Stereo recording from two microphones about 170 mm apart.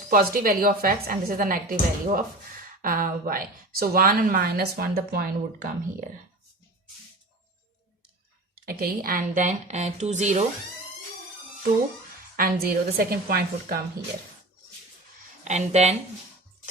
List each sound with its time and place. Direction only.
0.1 s a woman's voice: 60° right (ahead or behind)
2.8 s a woman's voice: 55° right (ahead or behind)
8.6 s speech: 60° right (ahead or behind); by 10.4 s 40° right (ahead or behind)
12.4 s a woman's voice: 65° right (ahead or behind)
15.4 s speech: 40° right (ahead or behind)